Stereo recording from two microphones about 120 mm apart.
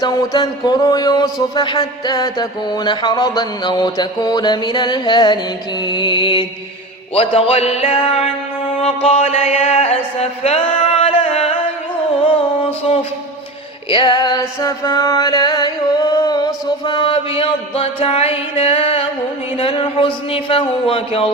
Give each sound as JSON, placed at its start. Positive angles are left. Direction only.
{"t": 0.0, "sound": "a sound", "side_deg": 35}
{"t": 7.1, "sound": "speech", "side_deg": 55}
{"t": 8.8, "sound": "a sound", "side_deg": 55}
{"t": 11.0, "sound": "music", "side_deg": 55}
{"t": 13.9, "sound": "mantra", "side_deg": 40}
{"t": 19.5, "sound": "speech", "side_deg": 50}